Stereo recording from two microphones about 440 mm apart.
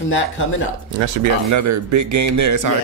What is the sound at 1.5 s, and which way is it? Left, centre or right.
Speech, right.